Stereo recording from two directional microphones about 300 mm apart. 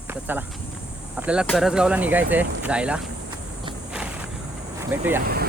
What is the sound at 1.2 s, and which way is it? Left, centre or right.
Speech, centre.